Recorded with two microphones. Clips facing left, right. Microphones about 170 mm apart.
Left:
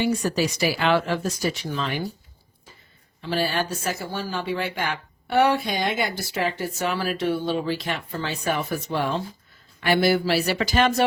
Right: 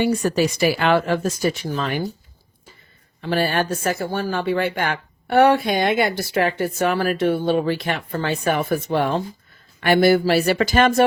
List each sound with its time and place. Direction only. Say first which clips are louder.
0.0 s speech: right 4 dB; 55° right (ahead or behind)
3.2 s speech: right 4 dB; 55° right (ahead or behind)